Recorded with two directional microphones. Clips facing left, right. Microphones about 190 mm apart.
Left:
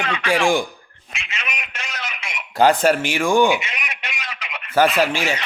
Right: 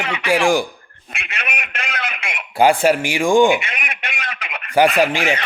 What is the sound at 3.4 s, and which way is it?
Radio, 55° right (ahead or behind).